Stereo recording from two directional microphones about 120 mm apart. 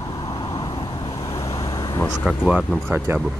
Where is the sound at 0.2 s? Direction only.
50° left (ahead or behind).